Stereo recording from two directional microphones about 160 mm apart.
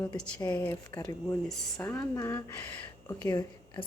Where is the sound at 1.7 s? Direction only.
15° left (ahead or behind).